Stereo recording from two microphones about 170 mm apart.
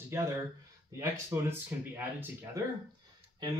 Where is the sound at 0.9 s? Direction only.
15° right (ahead or behind).